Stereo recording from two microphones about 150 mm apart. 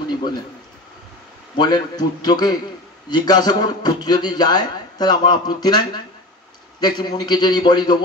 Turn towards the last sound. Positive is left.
turn(degrees=30)  # may be behind; listen again after turning